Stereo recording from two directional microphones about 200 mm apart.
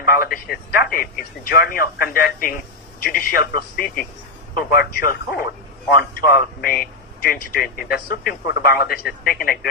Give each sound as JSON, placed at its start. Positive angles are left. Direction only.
{"t": 0.0, "sound": "speech", "side_deg": 50}